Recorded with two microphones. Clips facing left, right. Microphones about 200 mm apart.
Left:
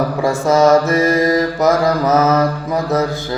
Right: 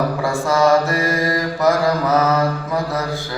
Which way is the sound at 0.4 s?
20° left (ahead or behind).